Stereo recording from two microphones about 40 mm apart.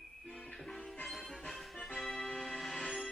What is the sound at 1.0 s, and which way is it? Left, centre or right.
Music, centre.